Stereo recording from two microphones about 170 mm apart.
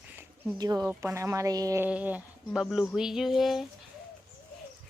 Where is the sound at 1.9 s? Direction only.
10° right (ahead or behind).